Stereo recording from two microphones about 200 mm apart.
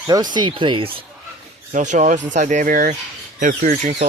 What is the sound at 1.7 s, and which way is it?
Speech, 35° right (ahead or behind).